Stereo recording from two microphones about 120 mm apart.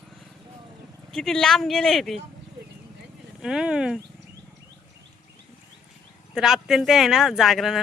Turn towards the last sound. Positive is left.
turn(degrees=0)  # may be behind; listen again after turning